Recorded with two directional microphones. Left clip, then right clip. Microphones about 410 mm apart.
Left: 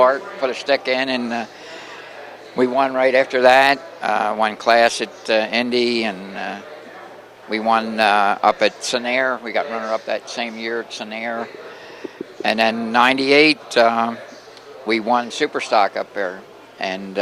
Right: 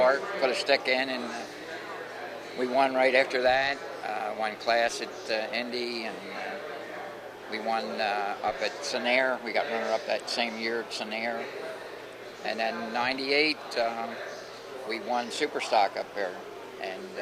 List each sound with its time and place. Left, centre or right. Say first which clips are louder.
0.0 s a man's voice: left 8 dB; left
2.6 s speech: left 8 dB; left
7.5 s speech: left 12 dB; left
12.4 s speech: left 12 dB; left